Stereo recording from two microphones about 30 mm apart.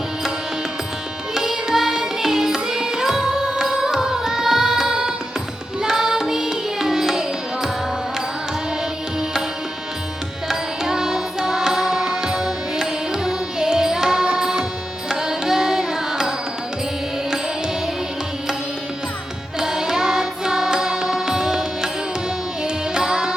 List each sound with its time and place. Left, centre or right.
1.3 s carnatic music: centre
5.8 s music: centre
10.5 s music: centre
15.1 s carnatic music: centre
19.5 s music: right